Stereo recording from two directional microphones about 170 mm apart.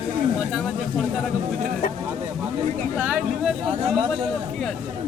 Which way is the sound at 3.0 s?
5° right (ahead or behind).